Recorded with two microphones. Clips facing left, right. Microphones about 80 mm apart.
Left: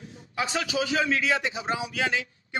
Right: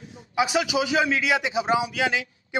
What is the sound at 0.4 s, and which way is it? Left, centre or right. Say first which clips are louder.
A man's voice: right 5 dB; centre.